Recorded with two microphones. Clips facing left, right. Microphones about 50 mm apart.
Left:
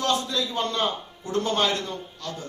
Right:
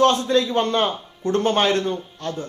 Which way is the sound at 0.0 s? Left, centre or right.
Right.